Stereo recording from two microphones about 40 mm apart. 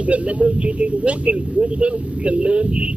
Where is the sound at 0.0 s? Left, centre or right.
Right.